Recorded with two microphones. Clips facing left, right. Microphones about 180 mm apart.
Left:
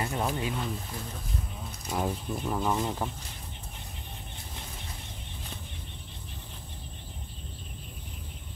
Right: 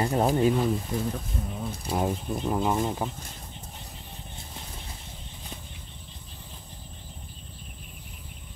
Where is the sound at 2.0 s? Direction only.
20° right (ahead or behind).